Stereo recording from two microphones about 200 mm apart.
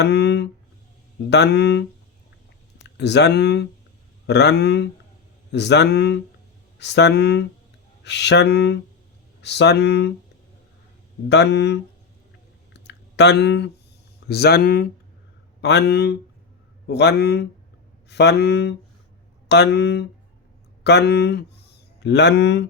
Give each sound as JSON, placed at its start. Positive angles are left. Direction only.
{"t": 0.0, "sound": "speech", "side_deg": 55}
{"t": 2.8, "sound": "speech", "side_deg": 60}
{"t": 11.3, "sound": "speech", "side_deg": 60}
{"t": 12.7, "sound": "a sound", "side_deg": 60}
{"t": 14.3, "sound": "speech", "side_deg": 55}